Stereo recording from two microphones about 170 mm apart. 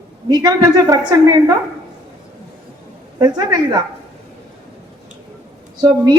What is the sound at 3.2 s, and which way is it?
Speech, 25° right (ahead or behind).